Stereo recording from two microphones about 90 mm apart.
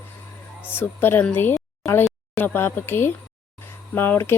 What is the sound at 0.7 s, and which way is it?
Speech, 25° left (ahead or behind).